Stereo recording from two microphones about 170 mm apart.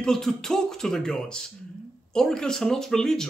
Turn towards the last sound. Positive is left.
turn(degrees=5)  # may be behind; listen again after turning